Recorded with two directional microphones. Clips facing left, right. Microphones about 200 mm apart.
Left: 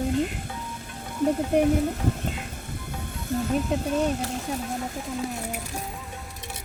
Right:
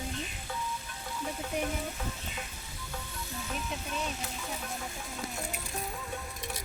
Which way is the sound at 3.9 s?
60° left (ahead or behind).